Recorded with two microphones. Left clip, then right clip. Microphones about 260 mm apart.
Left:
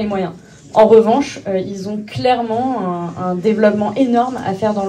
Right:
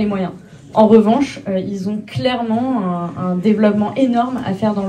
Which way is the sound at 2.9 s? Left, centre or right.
Left.